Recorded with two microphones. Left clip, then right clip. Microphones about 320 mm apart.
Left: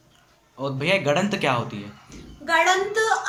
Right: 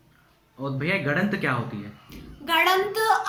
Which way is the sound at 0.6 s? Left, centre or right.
Centre.